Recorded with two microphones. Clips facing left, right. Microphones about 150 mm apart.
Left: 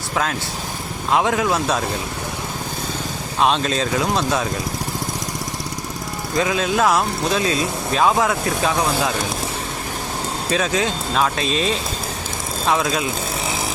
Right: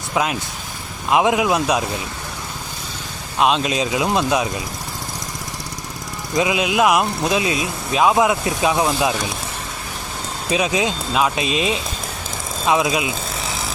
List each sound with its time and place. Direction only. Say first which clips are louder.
0.1 s speech: right 2 dB; 10° right (ahead or behind)
3.4 s speech: right 1 dB; 5° right (ahead or behind)
6.3 s speech: right 1 dB; 15° right (ahead or behind)
10.5 s speech: right 2 dB; 15° right (ahead or behind)